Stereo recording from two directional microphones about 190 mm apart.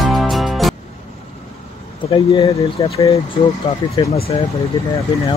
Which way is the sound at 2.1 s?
25° left (ahead or behind).